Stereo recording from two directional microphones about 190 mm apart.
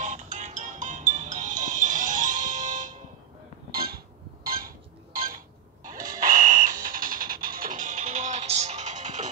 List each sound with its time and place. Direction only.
0.0 s music: 40° right (ahead or behind)
3.7 s a sound: 50° right (ahead or behind)
5.9 s music: 40° right (ahead or behind)